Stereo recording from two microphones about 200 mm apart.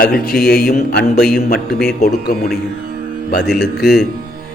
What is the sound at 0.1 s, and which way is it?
Speech, 5° left (ahead or behind).